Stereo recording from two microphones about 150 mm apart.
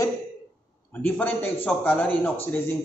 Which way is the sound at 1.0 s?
10° left (ahead or behind).